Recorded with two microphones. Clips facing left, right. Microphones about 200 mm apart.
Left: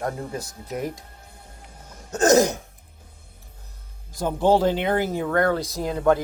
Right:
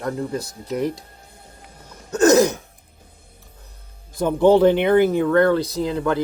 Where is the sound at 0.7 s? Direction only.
70° right (ahead or behind).